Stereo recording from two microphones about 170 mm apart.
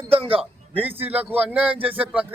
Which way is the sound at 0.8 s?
10° right (ahead or behind).